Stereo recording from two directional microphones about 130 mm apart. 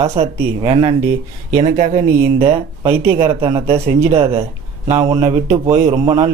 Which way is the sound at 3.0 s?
20° right (ahead or behind).